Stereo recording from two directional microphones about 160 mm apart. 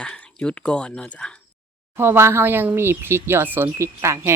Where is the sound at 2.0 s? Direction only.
15° right (ahead or behind).